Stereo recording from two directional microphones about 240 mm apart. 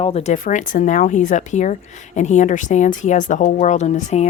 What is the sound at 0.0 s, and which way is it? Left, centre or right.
Speech, left.